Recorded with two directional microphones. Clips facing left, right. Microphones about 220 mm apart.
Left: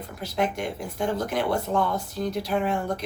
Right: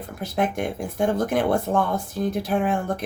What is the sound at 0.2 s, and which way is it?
Speech, 50° right (ahead or behind).